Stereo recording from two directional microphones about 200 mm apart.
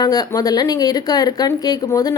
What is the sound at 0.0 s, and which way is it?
Speech, 20° left (ahead or behind).